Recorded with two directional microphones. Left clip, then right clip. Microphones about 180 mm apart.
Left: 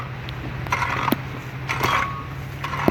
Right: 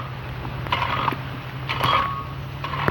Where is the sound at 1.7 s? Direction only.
Centre (ahead or behind).